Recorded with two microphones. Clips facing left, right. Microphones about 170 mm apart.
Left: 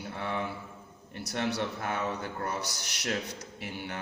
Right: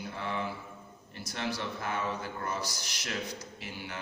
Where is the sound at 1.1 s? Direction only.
55° left (ahead or behind).